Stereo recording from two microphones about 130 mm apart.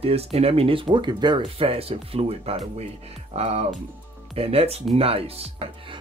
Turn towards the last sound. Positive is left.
turn(degrees=-50)  # may be behind; listen again after turning